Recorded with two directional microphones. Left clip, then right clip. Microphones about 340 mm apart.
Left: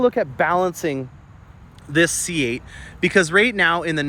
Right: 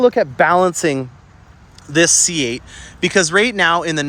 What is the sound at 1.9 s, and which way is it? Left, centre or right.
Speech, centre.